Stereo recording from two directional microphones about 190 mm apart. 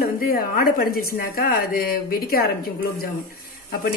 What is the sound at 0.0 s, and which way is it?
Speech, 50° left (ahead or behind).